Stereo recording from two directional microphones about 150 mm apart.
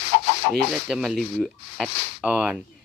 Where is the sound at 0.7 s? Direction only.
Centre (ahead or behind).